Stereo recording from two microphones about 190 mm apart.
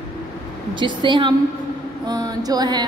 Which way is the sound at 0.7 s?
25° right (ahead or behind).